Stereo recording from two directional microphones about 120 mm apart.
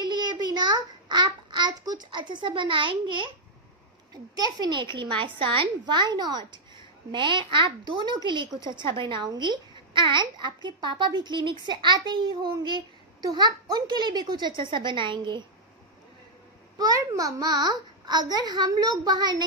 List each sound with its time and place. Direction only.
0.0 s child singing: 35° right (ahead or behind)
4.1 s a child's voice: 35° right (ahead or behind)
16.7 s a child's voice: 30° right (ahead or behind)